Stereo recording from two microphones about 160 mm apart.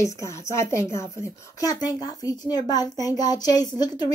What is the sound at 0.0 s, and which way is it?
A child's voice, 20° left (ahead or behind).